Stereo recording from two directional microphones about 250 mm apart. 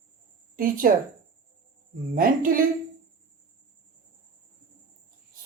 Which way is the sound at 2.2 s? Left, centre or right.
Right.